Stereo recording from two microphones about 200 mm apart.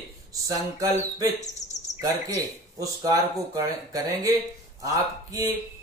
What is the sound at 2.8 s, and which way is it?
Speech, 15° right (ahead or behind).